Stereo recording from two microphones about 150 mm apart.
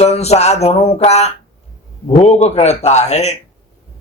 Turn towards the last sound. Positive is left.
turn(degrees=50)  # may be behind; listen again after turning